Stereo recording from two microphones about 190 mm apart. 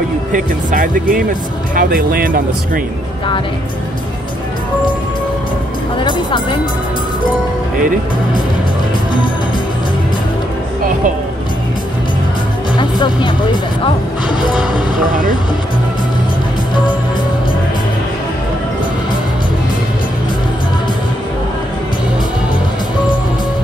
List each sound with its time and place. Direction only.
0.3 s speech: 45° right (ahead or behind)
5.9 s speech: 25° left (ahead or behind)
12.7 s speech: 25° left (ahead or behind)
14.5 s speech: 5° right (ahead or behind)